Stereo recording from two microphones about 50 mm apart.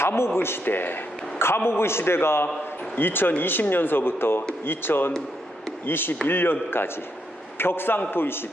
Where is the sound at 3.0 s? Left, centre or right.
Left.